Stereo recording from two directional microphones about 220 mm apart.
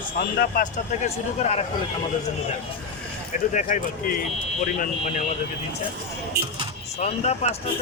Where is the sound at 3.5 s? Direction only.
35° left (ahead or behind).